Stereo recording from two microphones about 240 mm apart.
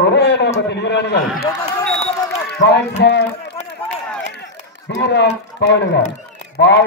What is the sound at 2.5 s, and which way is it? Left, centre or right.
Speech, left.